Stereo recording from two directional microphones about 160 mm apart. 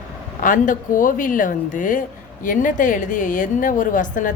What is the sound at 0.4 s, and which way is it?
Speech, 55° left (ahead or behind).